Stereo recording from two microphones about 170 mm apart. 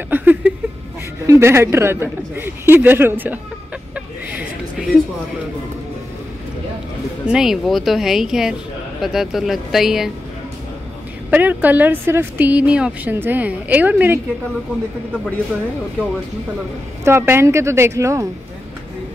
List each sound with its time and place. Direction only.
0.1 s a sound: 10° right (ahead or behind)
1.2 s a woman's voice: 15° right (ahead or behind)
3.9 s a sound: 10° right (ahead or behind)
7.2 s speech: 5° right (ahead or behind)
11.2 s a woman's voice: 10° right (ahead or behind)
17.0 s a woman's voice: 15° right (ahead or behind)